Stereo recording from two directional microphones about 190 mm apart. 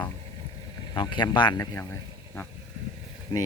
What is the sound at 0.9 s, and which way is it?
Speech, 25° left (ahead or behind).